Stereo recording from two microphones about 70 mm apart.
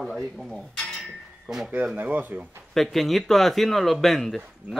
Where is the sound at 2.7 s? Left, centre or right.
Centre.